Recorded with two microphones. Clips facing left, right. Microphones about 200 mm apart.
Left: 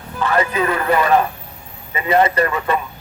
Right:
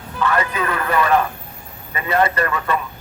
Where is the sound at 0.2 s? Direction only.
25° left (ahead or behind).